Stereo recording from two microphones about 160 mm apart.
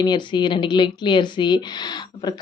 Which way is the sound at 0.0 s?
30° left (ahead or behind).